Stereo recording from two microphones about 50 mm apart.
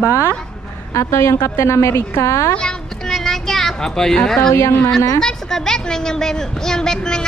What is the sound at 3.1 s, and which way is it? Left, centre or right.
A woman's voice, centre.